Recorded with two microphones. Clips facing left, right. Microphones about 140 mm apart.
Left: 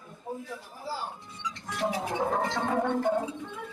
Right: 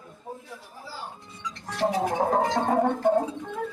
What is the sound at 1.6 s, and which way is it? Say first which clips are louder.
Speech: right 6 dB; 35° right (ahead or behind).